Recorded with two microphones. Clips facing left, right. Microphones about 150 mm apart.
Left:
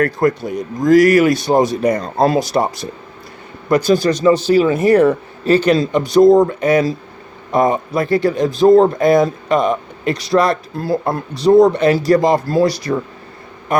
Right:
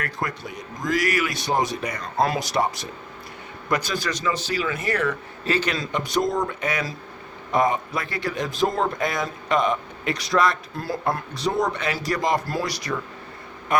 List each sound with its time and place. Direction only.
0.0 s speech: 40° left (ahead or behind)